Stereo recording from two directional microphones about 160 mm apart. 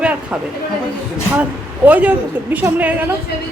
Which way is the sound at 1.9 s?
10° right (ahead or behind).